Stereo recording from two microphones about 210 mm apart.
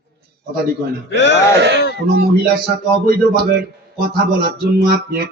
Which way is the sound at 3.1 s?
45° right (ahead or behind).